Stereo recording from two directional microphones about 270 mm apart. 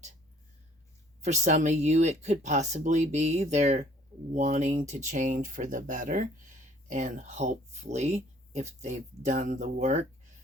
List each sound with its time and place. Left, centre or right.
1.2 s speech: right